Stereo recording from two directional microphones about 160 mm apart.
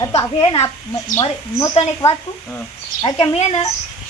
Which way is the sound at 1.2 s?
25° left (ahead or behind).